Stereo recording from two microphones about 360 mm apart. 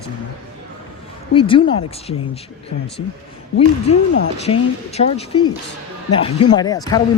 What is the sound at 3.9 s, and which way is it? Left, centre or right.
Speech, centre.